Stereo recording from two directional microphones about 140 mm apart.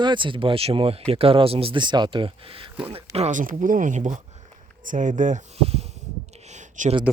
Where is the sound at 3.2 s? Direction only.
55° right (ahead or behind).